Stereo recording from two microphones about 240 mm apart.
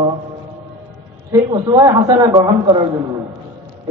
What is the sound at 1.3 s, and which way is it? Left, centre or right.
A man's voice, centre.